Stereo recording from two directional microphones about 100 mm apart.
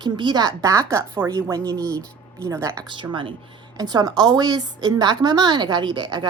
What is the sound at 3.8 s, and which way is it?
A woman's voice, 45° right (ahead or behind).